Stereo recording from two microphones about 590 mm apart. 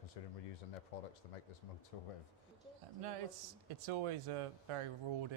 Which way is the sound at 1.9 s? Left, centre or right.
Left.